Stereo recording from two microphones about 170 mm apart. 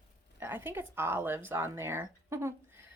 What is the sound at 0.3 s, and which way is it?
A woman's voice, 10° right (ahead or behind).